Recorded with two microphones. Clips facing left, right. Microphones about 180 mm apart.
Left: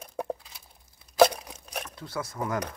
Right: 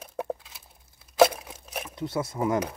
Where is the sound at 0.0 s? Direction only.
Centre (ahead or behind).